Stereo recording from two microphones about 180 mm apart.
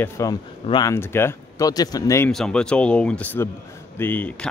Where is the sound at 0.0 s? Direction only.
15° left (ahead or behind).